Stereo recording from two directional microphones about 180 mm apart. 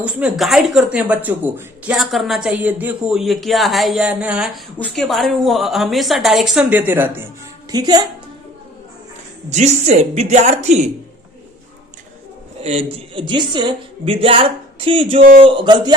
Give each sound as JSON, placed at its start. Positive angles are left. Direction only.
{"t": 0.0, "sound": "speech", "side_deg": -5}
{"t": 7.7, "sound": "a woman's voice", "side_deg": -20}
{"t": 9.5, "sound": "a woman's voice", "side_deg": -40}
{"t": 12.6, "sound": "a woman's voice", "side_deg": -35}